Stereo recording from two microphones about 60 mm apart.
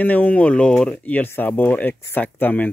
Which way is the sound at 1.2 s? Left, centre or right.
Left.